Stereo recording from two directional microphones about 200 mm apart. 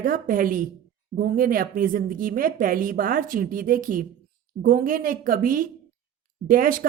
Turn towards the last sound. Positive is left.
turn(degrees=-45)  # may be behind; listen again after turning